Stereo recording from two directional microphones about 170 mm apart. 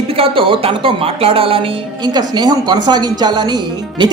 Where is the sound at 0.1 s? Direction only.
35° right (ahead or behind).